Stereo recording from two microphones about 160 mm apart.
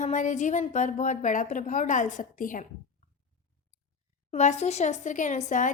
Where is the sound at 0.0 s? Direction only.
50° left (ahead or behind).